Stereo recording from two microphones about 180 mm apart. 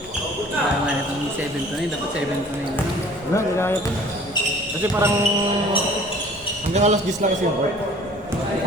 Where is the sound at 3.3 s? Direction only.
15° left (ahead or behind).